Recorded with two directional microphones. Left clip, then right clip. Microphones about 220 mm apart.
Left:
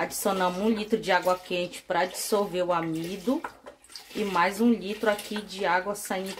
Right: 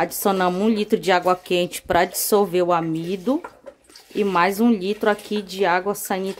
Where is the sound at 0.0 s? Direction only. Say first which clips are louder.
Right 6 dB; 50° right (ahead or behind).